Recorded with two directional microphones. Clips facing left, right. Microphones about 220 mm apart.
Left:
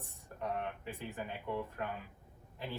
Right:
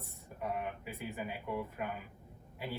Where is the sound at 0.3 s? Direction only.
5° right (ahead or behind).